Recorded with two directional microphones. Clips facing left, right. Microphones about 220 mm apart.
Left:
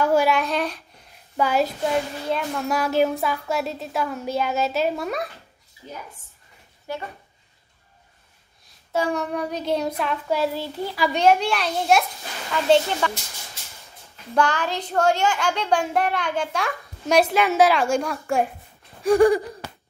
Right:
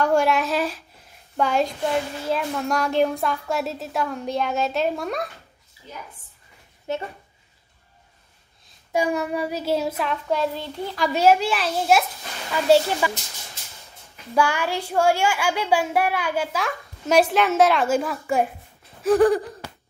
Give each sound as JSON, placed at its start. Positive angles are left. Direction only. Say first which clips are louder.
{"t": 0.0, "sound": "a woman's voice", "louder": "even", "side_deg": 5}
{"t": 6.9, "sound": "speech", "louder": "right 4 dB", "side_deg": -20}
{"t": 8.6, "sound": "a woman's voice", "louder": "right 1 dB", "side_deg": -15}
{"t": 14.3, "sound": "a child's voice", "louder": "even", "side_deg": -10}